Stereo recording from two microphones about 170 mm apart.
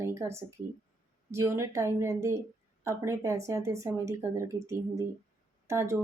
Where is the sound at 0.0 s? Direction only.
15° right (ahead or behind).